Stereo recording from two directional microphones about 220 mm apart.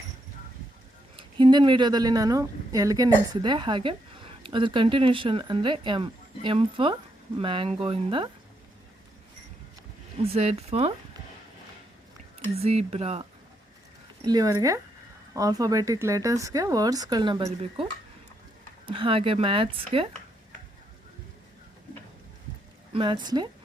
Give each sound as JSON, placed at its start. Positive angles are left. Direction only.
{"t": 1.1, "sound": "speech", "side_deg": -20}
{"t": 10.2, "sound": "speech", "side_deg": -25}
{"t": 12.5, "sound": "speech", "side_deg": -30}
{"t": 14.3, "sound": "speech", "side_deg": -15}
{"t": 18.9, "sound": "speech", "side_deg": -25}
{"t": 22.9, "sound": "speech", "side_deg": -20}